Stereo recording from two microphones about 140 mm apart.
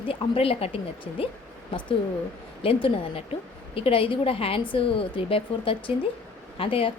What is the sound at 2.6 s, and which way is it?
Speech, 40° left (ahead or behind).